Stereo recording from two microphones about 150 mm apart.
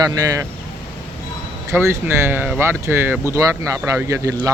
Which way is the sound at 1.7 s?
15° right (ahead or behind).